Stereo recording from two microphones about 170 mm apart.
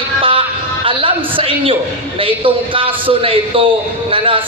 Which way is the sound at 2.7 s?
30° right (ahead or behind).